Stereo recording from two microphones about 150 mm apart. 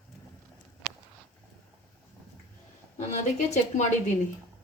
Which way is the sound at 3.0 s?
50° left (ahead or behind).